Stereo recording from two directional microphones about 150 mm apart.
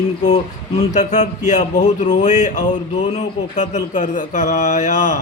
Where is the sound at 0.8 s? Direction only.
45° left (ahead or behind).